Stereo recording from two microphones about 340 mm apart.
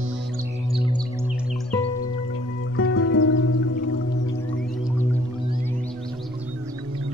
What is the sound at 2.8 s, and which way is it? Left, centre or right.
Music, left.